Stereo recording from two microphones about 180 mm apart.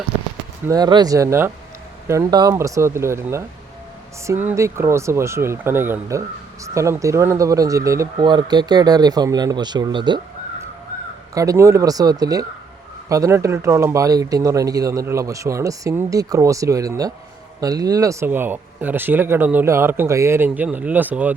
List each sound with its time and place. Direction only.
0.7 s speech: 25° right (ahead or behind)
11.3 s speech: 15° right (ahead or behind)